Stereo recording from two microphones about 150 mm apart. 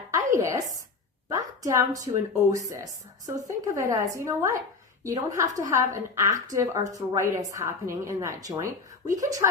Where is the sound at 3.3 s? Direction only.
25° right (ahead or behind).